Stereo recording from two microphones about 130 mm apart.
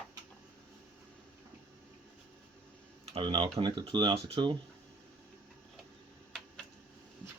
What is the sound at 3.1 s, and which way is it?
Speech, 40° right (ahead or behind).